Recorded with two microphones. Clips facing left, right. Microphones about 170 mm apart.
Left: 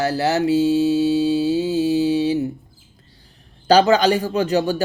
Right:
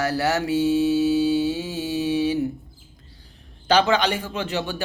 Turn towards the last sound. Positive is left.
turn(degrees=40)  # may be behind; listen again after turning